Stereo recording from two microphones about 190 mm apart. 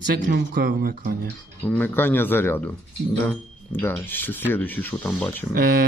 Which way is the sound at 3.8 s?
10° left (ahead or behind).